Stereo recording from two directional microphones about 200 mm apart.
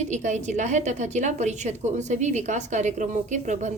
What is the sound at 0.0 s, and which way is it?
A woman's voice, 35° right (ahead or behind).